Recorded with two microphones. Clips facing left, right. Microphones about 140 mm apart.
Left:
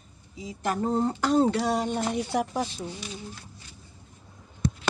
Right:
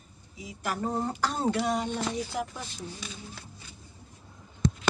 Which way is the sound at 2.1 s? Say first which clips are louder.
Left 6 dB; 70° left (ahead or behind).